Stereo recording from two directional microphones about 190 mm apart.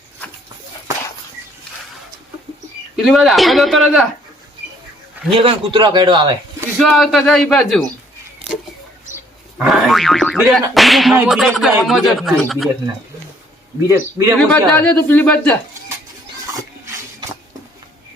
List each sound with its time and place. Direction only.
2.9 s speech: centre (ahead or behind)
5.4 s a man's voice: 30° right (ahead or behind)
6.8 s speech: centre (ahead or behind)
9.6 s speech: centre (ahead or behind)
13.8 s a man's voice: 15° right (ahead or behind)
14.3 s speech: 5° left (ahead or behind)